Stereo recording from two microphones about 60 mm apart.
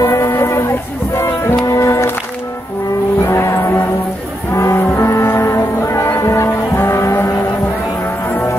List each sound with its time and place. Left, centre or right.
0.0 s music: left
0.6 s a sound: left
1.7 s music: left
3.3 s music: left